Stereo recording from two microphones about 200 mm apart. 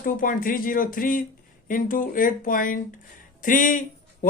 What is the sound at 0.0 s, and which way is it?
Speech, 45° left (ahead or behind).